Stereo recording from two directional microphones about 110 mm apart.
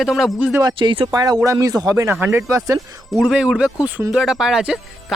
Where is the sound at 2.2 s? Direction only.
20° right (ahead or behind).